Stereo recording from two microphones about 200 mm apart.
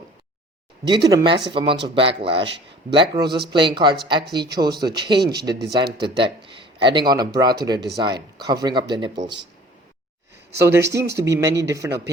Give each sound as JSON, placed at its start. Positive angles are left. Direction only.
{"t": 1.0, "sound": "speech", "side_deg": -20}
{"t": 10.6, "sound": "speech", "side_deg": -15}